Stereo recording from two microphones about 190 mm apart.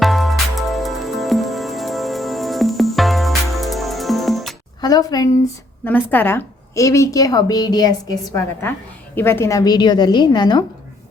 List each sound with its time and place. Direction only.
0.0 s music: centre (ahead or behind)
4.8 s a woman's voice: 20° left (ahead or behind)